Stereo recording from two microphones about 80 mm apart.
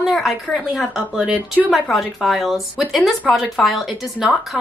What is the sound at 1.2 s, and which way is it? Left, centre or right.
Speech, centre.